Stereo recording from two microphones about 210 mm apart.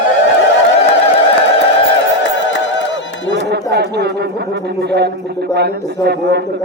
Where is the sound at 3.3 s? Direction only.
50° right (ahead or behind).